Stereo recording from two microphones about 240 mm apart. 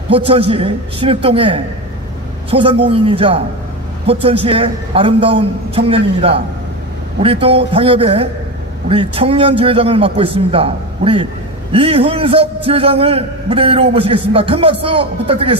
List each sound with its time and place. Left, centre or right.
0.1 s a man's voice: right